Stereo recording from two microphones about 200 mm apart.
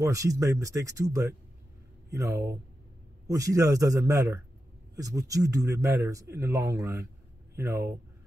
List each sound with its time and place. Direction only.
0.0 s a man's voice: 15° right (ahead or behind)